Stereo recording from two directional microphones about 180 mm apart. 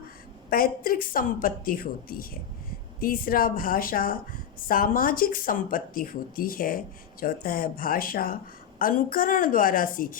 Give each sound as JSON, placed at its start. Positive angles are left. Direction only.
{"t": 0.5, "sound": "a woman's voice", "side_deg": 55}